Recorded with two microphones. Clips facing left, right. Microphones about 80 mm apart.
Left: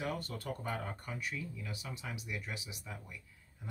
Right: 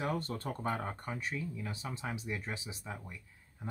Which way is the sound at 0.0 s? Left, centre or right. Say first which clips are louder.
Right 3 dB; right.